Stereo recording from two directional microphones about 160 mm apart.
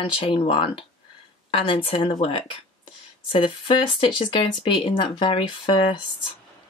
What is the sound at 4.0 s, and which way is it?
Speech, 30° left (ahead or behind).